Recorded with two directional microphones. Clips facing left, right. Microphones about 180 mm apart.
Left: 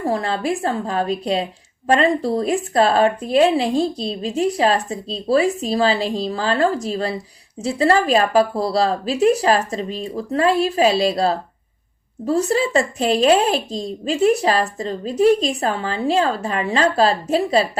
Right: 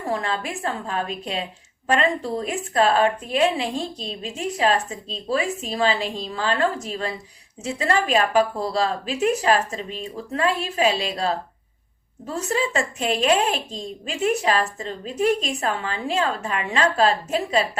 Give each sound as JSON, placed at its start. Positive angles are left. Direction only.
{"t": 0.0, "sound": "speech", "side_deg": 35}